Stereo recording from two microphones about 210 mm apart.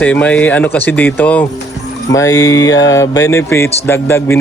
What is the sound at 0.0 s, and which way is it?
Speech, 5° left (ahead or behind).